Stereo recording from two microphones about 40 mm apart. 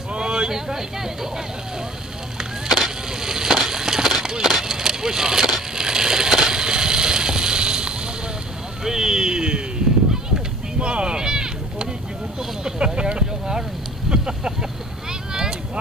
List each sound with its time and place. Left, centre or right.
0.1 s speech: right
2.3 s skateboard: centre
4.5 s crushing: centre
8.8 s vehicle: centre
10.8 s a sound: right
14.1 s speech: right
15.3 s vehicle: centre